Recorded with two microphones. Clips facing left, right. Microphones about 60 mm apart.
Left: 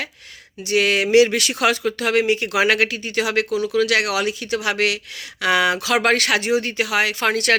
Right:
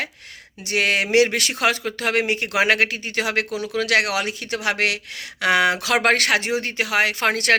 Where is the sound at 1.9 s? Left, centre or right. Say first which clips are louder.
Left 3 dB; right.